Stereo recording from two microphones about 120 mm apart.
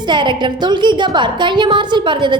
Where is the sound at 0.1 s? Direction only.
40° right (ahead or behind).